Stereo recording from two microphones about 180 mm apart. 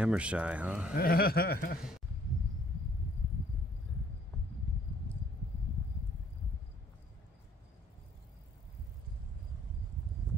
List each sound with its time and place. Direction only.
0.0 s speech: 5° right (ahead or behind)
0.9 s speech: 55° left (ahead or behind)